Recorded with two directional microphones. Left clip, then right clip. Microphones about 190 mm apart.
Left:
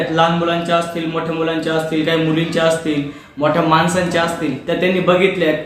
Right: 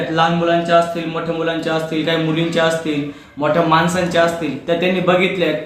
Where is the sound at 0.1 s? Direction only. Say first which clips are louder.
Right 2 dB; 15° right (ahead or behind).